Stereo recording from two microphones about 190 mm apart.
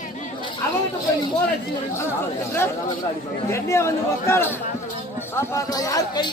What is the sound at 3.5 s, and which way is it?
Speech, 15° left (ahead or behind).